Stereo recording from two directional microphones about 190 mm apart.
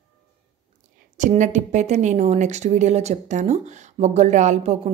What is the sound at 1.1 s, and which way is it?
A woman's voice, 40° right (ahead or behind).